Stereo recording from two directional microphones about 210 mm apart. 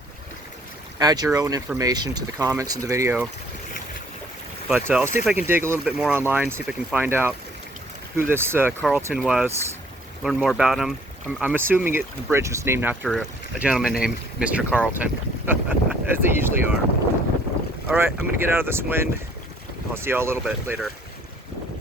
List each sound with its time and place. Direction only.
0.9 s speech: 20° right (ahead or behind)
4.7 s speech: 5° right (ahead or behind)
17.8 s speech: 10° right (ahead or behind)